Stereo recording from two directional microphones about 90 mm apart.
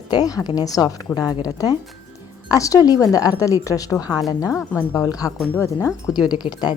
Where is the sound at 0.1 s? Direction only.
45° left (ahead or behind).